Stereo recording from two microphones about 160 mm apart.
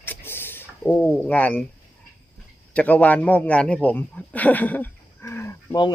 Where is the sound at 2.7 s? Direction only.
10° left (ahead or behind).